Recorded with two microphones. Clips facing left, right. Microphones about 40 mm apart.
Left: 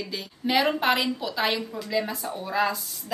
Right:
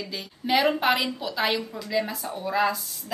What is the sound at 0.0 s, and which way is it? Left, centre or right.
A woman's voice, centre.